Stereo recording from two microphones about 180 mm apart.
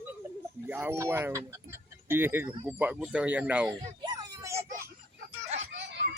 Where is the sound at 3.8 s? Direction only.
25° right (ahead or behind).